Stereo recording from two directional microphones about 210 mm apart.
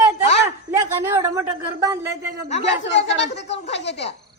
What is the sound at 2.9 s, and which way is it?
Speech, 60° left (ahead or behind).